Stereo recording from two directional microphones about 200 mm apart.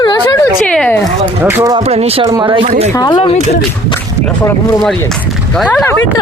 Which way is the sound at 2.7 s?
35° right (ahead or behind).